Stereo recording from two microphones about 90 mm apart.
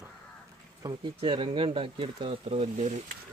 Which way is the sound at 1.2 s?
80° right.